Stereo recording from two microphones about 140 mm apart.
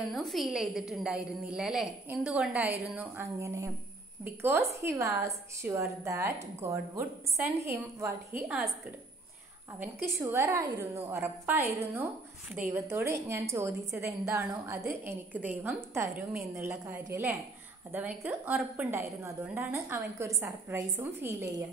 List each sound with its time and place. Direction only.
0.1 s a woman's voice: centre (ahead or behind)
3.0 s a woman's voice: 20° right (ahead or behind)
10.2 s a woman's voice: 20° right (ahead or behind)
16.1 s a woman's voice: centre (ahead or behind)
16.5 s a woman's voice: 15° right (ahead or behind)